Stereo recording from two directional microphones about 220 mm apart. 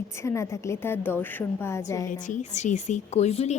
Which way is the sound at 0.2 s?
10° left (ahead or behind).